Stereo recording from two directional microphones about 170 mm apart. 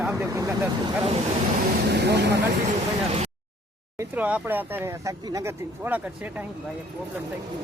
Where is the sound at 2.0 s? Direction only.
85° right.